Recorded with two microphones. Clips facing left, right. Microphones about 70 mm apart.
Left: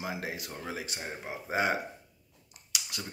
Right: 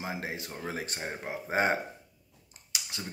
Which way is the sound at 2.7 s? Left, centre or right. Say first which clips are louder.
Even; right.